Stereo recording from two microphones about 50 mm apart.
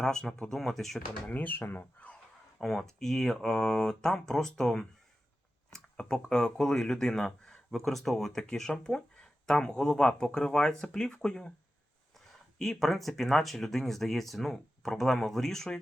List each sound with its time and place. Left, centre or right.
0.0 s speech: centre
1.3 s speech: left
2.6 s speech: centre
12.5 s speech: centre